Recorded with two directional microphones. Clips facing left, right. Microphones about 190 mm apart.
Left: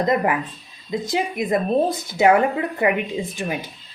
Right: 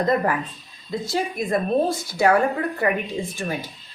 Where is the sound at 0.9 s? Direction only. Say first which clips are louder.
Left 2 dB; 15° left (ahead or behind).